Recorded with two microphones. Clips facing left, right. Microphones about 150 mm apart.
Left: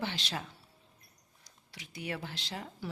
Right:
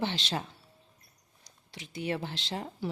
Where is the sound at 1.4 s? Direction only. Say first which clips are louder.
Right 5 dB; 25° right (ahead or behind).